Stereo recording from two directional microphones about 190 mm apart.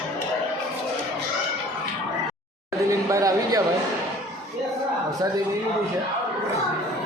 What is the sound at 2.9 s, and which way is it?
Speech, 15° right (ahead or behind).